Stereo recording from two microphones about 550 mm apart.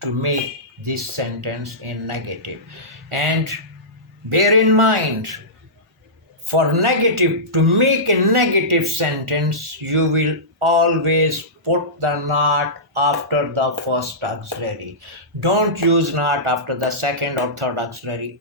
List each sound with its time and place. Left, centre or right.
0.0 s speech: right
6.5 s speech: right
15.4 s speech: right